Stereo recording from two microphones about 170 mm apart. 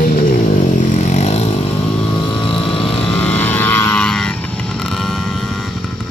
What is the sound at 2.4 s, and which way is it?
Vehicle, 5° left (ahead or behind).